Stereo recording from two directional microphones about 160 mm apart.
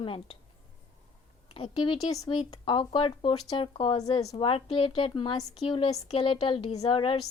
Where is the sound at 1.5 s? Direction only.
30° left (ahead or behind).